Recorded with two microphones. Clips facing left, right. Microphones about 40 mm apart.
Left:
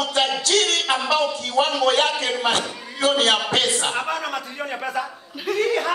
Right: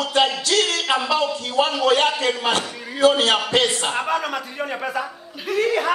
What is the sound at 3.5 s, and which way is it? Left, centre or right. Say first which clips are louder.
A man's voice: right 1 dB; centre.